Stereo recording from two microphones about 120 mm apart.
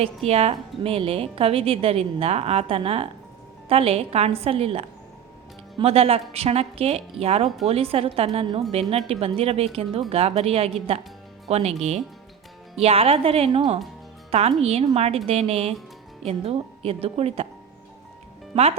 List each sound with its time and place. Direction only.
0.3 s a woman's voice: 55° right (ahead or behind)
12.7 s a woman's voice: 55° right (ahead or behind)
14.3 s a woman's voice: 60° right (ahead or behind)